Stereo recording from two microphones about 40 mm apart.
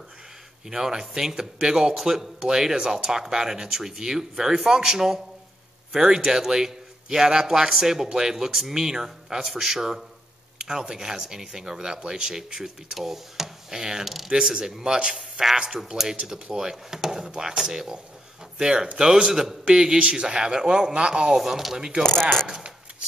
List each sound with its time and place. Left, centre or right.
0.7 s speech: centre
14.0 s speech: centre
14.3 s speech: centre
16.5 s speech: centre
21.4 s speech: centre
21.7 s speech: centre